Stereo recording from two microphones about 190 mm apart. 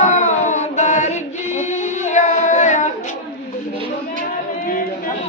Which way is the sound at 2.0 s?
40° left (ahead or behind).